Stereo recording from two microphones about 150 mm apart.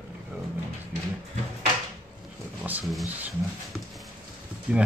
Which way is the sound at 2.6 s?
10° right (ahead or behind).